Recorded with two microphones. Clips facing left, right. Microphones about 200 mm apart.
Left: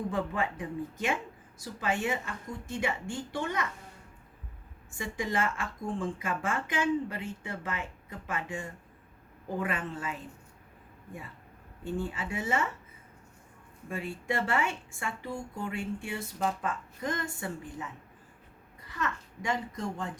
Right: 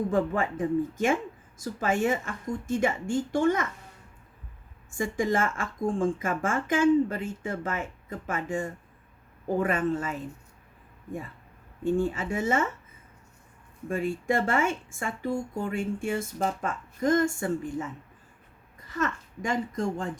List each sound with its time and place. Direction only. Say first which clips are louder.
0.1 s speech: right 6 dB; 45° right (ahead or behind)
4.9 s speech: right 6 dB; 45° right (ahead or behind)
11.8 s speech: right 8 dB; 45° right (ahead or behind)
13.8 s speech: right 7 dB; 45° right (ahead or behind)
18.9 s speech: right 5 dB; 45° right (ahead or behind)